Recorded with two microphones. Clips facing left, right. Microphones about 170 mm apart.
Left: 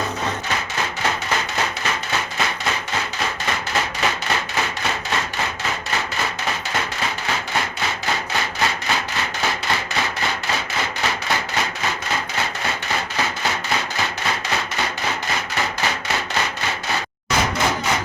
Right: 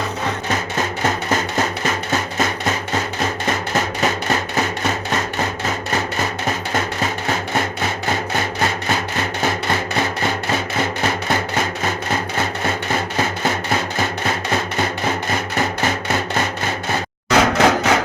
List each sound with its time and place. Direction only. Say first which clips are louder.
0.5 s music: right 4 dB; 45° right (ahead or behind)
6.7 s rub: right 4 dB; 45° right (ahead or behind)
17.2 s a sound: right 7 dB; 75° right (ahead or behind)